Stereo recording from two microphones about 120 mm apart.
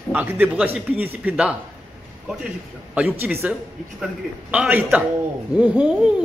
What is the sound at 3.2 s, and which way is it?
Speech, 20° right (ahead or behind).